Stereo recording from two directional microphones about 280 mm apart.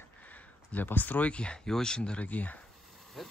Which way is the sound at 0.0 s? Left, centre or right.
Centre.